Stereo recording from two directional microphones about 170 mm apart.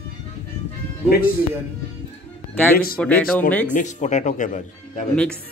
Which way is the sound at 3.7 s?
45° left (ahead or behind).